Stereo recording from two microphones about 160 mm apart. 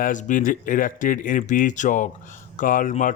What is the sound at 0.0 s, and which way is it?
Speech, 55° left (ahead or behind).